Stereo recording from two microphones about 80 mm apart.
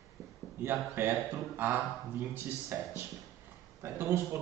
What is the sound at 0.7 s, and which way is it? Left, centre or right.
Speech, right.